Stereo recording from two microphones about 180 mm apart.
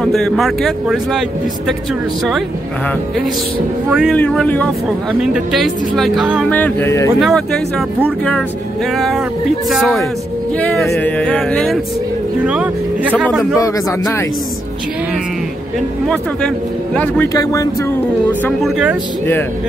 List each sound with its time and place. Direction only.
0.0 s speech: centre (ahead or behind)
4.1 s speech: 5° left (ahead or behind)
6.5 s speech: 10° left (ahead or behind)
7.2 s speech: centre (ahead or behind)
8.9 s speech: centre (ahead or behind)
12.4 s speech: 5° right (ahead or behind)
13.6 s speech: 15° left (ahead or behind)
16.1 s speech: 5° left (ahead or behind)
17.3 s speech: 20° left (ahead or behind)
18.4 s speech: centre (ahead or behind)